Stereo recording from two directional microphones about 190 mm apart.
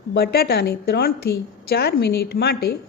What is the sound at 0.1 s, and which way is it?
A woman's voice, 55° left (ahead or behind).